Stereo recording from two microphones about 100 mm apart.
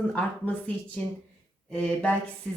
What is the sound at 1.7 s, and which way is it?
Speech, 15° left (ahead or behind).